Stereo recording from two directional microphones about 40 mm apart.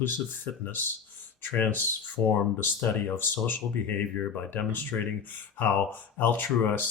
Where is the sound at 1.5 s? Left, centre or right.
Left.